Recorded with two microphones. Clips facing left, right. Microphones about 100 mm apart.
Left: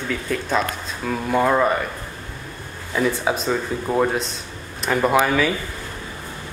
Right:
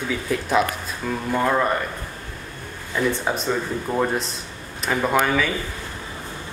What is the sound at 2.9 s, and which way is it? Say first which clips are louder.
Speech: left 2 dB; 5° left (ahead or behind).